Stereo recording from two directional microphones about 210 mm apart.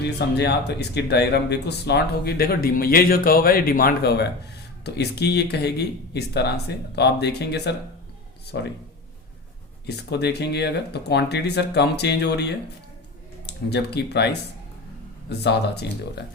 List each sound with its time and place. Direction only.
0.0 s speech: 55° left (ahead or behind)
9.8 s speech: 50° left (ahead or behind)
15.3 s speech: 50° left (ahead or behind)